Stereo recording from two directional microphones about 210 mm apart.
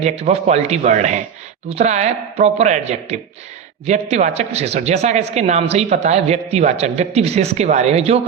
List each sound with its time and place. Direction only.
0.0 s a man's voice: 30° right (ahead or behind)